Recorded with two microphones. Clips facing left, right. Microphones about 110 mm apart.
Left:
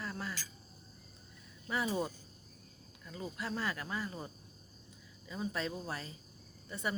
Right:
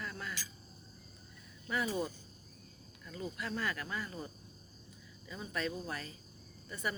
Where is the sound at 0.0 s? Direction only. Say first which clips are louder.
Left 2 dB; 30° left (ahead or behind).